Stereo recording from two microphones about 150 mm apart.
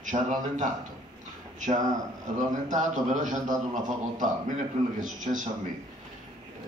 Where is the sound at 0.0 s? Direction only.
55° right (ahead or behind).